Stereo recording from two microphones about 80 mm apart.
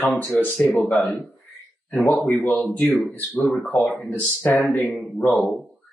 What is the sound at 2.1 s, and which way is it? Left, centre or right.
Speech, centre.